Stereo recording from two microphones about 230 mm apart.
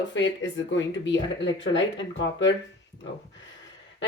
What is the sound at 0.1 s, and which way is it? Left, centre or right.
Speech, left.